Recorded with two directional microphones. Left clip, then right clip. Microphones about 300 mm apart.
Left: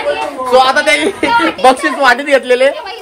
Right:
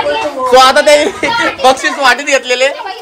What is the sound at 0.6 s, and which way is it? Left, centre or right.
Speech, right.